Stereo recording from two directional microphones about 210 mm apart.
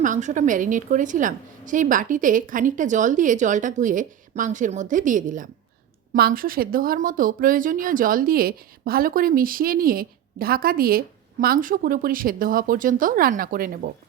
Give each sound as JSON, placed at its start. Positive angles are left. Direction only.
{"t": 0.0, "sound": "a woman's voice", "side_deg": -35}